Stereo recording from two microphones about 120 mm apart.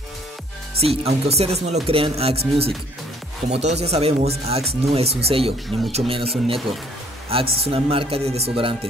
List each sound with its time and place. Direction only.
0.7 s speech: 55° right (ahead or behind)